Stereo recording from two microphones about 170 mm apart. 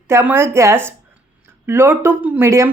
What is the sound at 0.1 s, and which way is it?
Speech, 15° right (ahead or behind).